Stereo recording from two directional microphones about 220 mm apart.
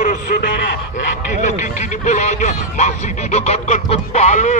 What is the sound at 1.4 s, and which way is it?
Speech, 35° left (ahead or behind).